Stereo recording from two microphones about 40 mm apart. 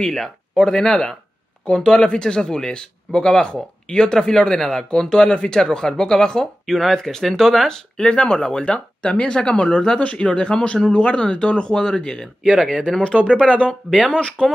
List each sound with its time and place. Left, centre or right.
0.0 s speech: centre
6.6 s speech: centre
8.0 s speech: left
13.0 s speech: left